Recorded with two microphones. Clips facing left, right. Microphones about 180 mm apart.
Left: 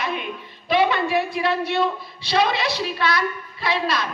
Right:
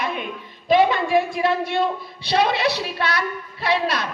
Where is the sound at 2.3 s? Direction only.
60° right (ahead or behind).